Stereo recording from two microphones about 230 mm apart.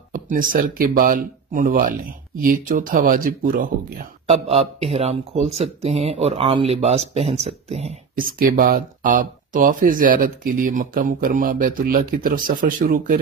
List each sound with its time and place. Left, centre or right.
0.1 s speech: right
4.3 s speech: right